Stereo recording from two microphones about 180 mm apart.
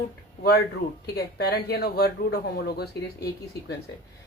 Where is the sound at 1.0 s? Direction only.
65° left (ahead or behind).